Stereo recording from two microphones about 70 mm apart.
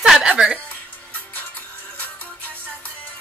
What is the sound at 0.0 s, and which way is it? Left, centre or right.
Music, centre.